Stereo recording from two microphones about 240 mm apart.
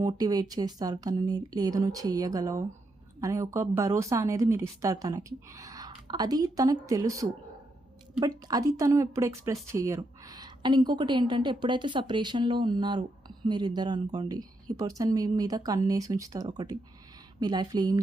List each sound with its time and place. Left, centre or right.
0.0 s a woman's voice: centre
8.4 s a woman's voice: centre